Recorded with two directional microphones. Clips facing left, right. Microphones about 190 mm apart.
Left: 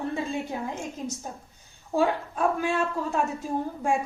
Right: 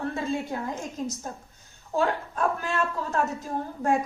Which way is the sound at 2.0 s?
10° left (ahead or behind).